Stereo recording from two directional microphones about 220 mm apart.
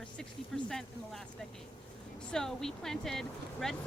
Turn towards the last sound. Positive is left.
turn(degrees=0)  # may be behind; listen again after turning